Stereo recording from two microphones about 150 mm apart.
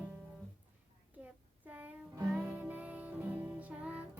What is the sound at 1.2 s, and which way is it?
Music, 10° right (ahead or behind).